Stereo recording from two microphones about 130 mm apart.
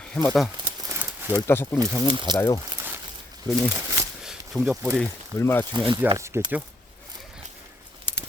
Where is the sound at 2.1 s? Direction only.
40° right (ahead or behind).